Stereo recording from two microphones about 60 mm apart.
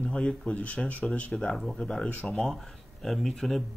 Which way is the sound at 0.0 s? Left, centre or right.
Centre.